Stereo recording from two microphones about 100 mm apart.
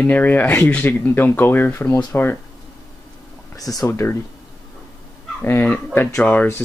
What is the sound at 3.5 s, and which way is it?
Speech, 40° left (ahead or behind).